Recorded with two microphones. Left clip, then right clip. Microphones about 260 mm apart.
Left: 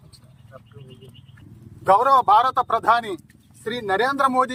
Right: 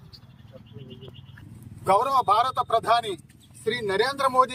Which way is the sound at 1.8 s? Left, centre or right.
Left.